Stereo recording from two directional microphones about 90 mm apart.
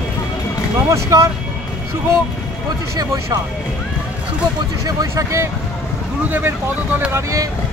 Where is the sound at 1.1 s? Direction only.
40° right (ahead or behind).